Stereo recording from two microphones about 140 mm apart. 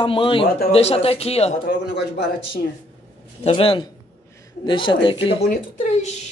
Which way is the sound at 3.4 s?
40° left (ahead or behind).